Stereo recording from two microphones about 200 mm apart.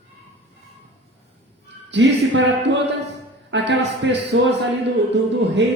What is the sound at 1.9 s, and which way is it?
Speech, 65° right (ahead or behind).